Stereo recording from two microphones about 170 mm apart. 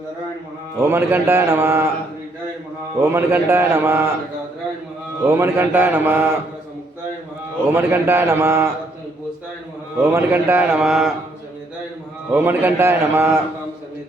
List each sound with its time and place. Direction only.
0.8 s a man's voice: 15° right (ahead or behind)
3.0 s a man's voice: 15° right (ahead or behind)
5.4 s a man's voice: 15° right (ahead or behind)
7.7 s a man's voice: 10° right (ahead or behind)
10.0 s a man's voice: 10° right (ahead or behind)
12.3 s a man's voice: 10° right (ahead or behind)